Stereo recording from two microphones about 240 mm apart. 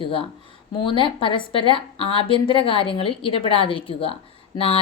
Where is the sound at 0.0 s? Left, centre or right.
Left.